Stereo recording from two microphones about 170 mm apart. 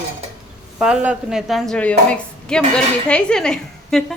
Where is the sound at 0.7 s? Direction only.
5° right (ahead or behind).